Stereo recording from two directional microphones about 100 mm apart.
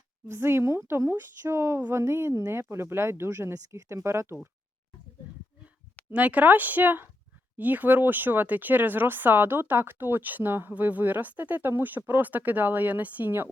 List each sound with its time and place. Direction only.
0.3 s speech: 25° right (ahead or behind)
6.1 s speech: 15° right (ahead or behind)